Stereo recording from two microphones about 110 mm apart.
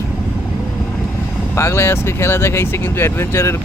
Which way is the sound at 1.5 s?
25° left (ahead or behind).